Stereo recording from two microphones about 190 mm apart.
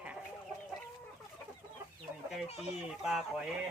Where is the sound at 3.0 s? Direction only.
5° right (ahead or behind).